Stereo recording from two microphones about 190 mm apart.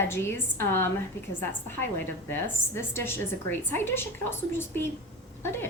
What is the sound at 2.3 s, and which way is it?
A woman's voice, 10° left (ahead or behind).